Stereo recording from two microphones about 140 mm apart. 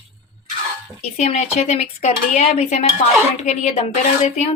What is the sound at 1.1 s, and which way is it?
Speech, 55° left (ahead or behind).